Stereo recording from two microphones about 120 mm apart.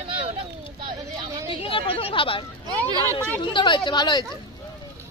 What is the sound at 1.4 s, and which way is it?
A woman's voice, 45° left (ahead or behind).